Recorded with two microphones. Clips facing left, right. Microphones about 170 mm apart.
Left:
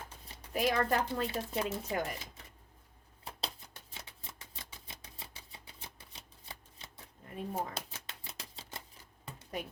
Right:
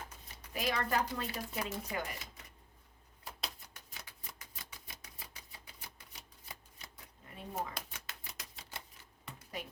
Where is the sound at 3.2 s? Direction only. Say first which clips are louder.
Left 2 dB; 25° left (ahead or behind).